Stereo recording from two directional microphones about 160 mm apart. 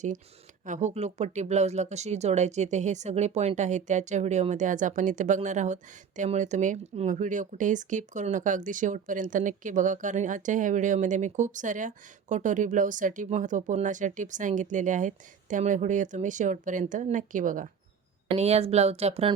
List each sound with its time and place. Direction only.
0.6 s speech: 50° right (ahead or behind)
18.3 s speech: 40° right (ahead or behind)